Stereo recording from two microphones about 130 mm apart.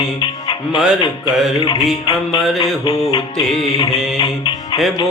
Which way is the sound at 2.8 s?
35° left (ahead or behind).